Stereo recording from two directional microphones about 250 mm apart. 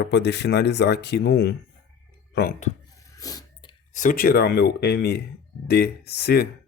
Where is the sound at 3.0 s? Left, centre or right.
Centre.